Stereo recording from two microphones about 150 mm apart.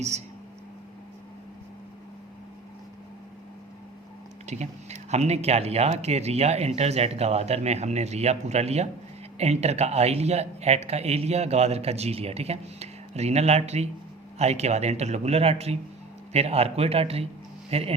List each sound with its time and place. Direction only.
4.4 s a man's voice: 50° right (ahead or behind)